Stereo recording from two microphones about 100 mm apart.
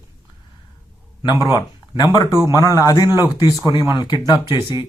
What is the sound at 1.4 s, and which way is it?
Speech, 45° left (ahead or behind).